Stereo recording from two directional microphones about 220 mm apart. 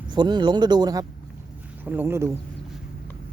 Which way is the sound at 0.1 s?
20° right (ahead or behind).